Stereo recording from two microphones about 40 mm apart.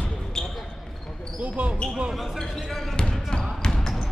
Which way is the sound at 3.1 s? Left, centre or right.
Centre.